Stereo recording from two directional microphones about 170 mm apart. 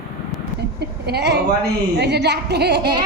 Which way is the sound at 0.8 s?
70° right (ahead or behind).